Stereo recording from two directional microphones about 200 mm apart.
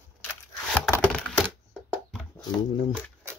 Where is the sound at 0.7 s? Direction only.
5° left (ahead or behind).